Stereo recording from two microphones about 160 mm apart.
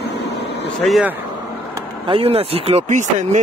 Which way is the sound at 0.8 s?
Centre (ahead or behind).